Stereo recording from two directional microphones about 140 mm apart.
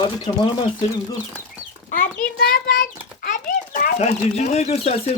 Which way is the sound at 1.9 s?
85° left.